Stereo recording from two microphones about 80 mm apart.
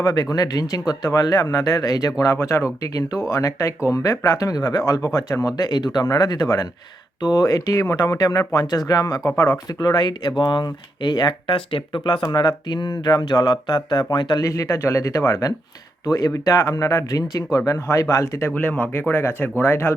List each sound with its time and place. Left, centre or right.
0.0 s speech: left
2.8 s speech: left
5.5 s speech: left
12.2 s speech: left
14.4 s speech: left
18.4 s speech: left